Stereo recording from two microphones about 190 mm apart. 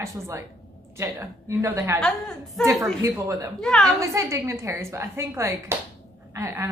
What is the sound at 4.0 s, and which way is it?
A woman's voice, 15° right (ahead or behind).